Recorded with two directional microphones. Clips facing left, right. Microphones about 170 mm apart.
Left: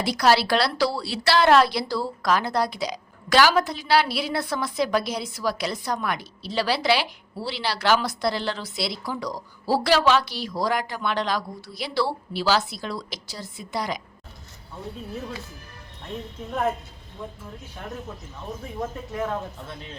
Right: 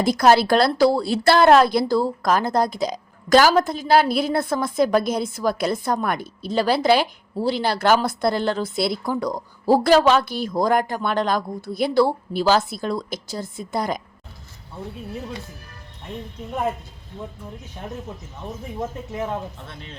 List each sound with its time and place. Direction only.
0.0 s a woman's voice: 45° right (ahead or behind)
19.1 s speech: 15° right (ahead or behind)
19.6 s speech: centre (ahead or behind)